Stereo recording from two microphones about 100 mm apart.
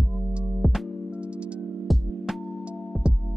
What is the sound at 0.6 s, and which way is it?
Music, centre (ahead or behind).